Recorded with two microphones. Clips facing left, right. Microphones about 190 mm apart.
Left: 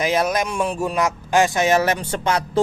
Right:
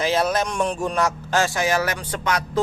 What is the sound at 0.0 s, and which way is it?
Speech, 15° left (ahead or behind).